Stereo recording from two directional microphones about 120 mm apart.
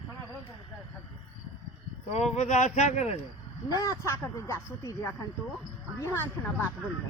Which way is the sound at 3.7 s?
25° left (ahead or behind).